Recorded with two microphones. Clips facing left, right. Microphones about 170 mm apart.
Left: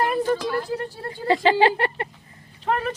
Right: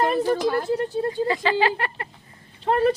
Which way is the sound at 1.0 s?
25° right (ahead or behind).